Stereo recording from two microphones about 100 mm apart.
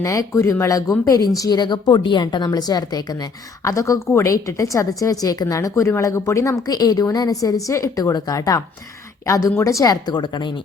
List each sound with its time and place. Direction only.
0.0 s a woman's voice: 35° left (ahead or behind)
1.4 s a woman's voice: 45° left (ahead or behind)